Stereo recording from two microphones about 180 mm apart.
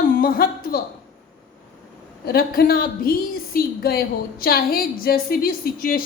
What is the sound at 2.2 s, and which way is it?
A woman's voice, 55° left (ahead or behind).